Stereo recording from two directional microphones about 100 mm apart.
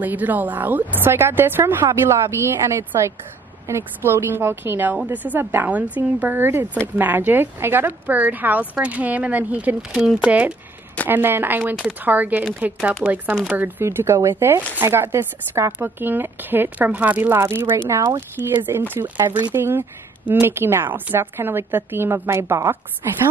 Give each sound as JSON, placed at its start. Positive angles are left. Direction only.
{"t": 0.0, "sound": "a woman's voice", "side_deg": -15}